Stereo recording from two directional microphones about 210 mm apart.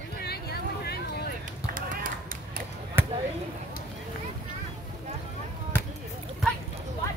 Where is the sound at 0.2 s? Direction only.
50° left (ahead or behind).